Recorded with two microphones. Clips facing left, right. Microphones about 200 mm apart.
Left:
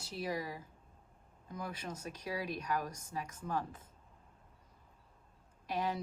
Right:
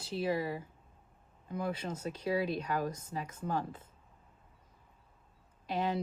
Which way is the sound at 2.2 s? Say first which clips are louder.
Right 7 dB; 25° right (ahead or behind).